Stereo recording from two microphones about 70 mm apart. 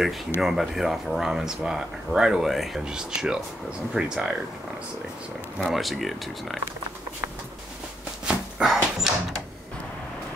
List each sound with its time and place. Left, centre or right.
0.4 s speech: centre
5.7 s speech: centre
8.5 s dog: centre